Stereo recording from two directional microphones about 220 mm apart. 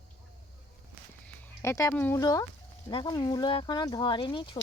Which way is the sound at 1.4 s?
10° left (ahead or behind).